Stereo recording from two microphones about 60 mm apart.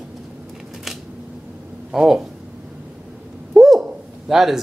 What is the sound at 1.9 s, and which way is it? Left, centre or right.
Speech, centre.